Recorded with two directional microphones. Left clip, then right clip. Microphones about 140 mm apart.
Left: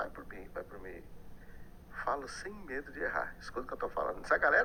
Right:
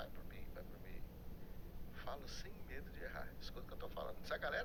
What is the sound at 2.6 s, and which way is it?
Speech, 30° right (ahead or behind).